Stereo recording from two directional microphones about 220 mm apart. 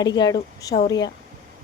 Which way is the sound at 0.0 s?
20° left (ahead or behind).